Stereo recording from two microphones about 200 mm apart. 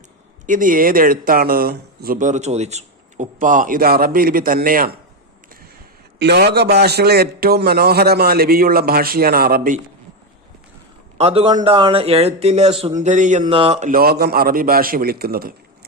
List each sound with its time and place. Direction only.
0.4 s speech: 40° right (ahead or behind)
6.1 s speech: 55° right (ahead or behind)
11.2 s speech: 30° right (ahead or behind); by 15.5 s 50° right (ahead or behind)